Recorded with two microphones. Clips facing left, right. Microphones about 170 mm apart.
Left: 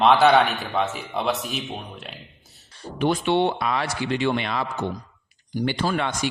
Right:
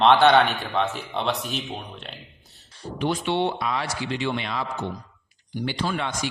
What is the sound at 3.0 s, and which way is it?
Speech, 55° left (ahead or behind).